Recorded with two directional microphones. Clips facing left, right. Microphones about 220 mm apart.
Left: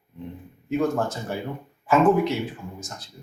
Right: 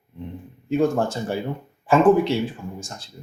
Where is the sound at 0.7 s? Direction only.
30° right (ahead or behind).